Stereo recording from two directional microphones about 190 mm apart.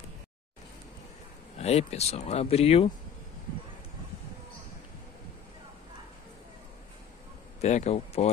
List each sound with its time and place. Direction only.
1.6 s speech: 35° left (ahead or behind)
7.6 s speech: 35° left (ahead or behind)